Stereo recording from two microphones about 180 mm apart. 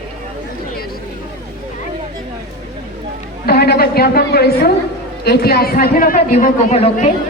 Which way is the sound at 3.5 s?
60° left (ahead or behind).